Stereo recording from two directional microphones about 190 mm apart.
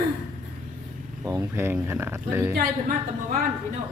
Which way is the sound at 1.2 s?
15° right (ahead or behind).